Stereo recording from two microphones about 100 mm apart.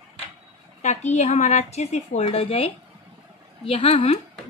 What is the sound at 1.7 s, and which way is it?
Speech, 90° left.